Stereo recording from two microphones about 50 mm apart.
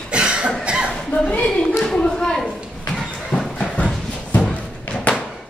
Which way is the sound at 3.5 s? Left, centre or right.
Left.